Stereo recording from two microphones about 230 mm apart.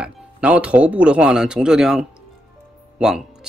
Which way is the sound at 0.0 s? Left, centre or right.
Centre.